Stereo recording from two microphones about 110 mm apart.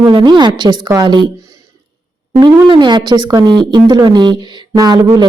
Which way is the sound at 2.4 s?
45° right (ahead or behind).